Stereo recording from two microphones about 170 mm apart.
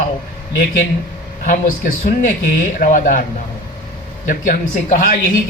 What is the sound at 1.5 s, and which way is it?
A man's voice, 50° left (ahead or behind).